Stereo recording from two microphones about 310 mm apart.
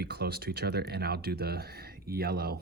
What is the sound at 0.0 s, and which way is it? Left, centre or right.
Speech, right.